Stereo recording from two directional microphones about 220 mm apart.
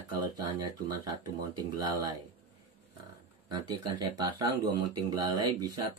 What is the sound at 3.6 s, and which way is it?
Speech, 20° right (ahead or behind).